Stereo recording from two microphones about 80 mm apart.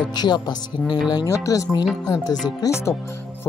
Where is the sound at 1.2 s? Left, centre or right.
Left.